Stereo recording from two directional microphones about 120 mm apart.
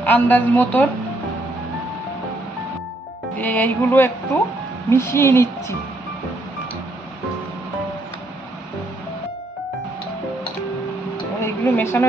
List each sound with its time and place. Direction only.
0.0 s a woman's voice: 15° left (ahead or behind)
3.3 s a woman's voice: 15° left (ahead or behind)
11.3 s a sound: 20° left (ahead or behind)